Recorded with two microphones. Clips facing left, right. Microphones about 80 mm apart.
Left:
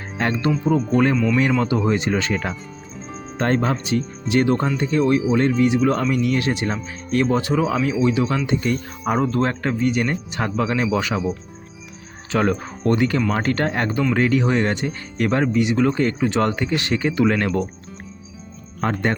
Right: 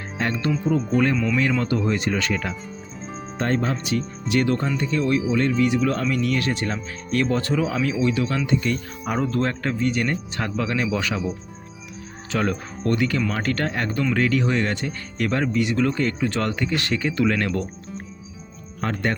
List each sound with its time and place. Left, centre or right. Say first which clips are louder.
0.2 s speech: left 3 dB; left
0.5 s speech: left 1 dB; centre
1.5 s speech: left 3 dB; centre; by 2.6 s left
3.3 s speech: left 3 dB; left
3.8 s speech: left 2 dB; left
12.3 s speech: left 4 dB; left
12.8 s speech: left 3 dB; left
13.9 s speech: left 3 dB; centre
14.2 s speech: left 3 dB; left
18.8 s speech: left 3 dB; left